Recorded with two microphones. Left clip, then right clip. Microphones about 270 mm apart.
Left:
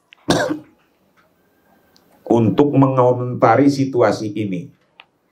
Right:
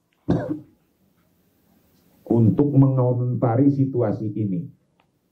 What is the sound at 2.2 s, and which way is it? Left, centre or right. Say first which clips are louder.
Speech: left 6 dB; centre.